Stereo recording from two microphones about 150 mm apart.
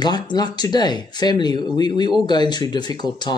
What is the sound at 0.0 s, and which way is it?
Speech, 30° left (ahead or behind).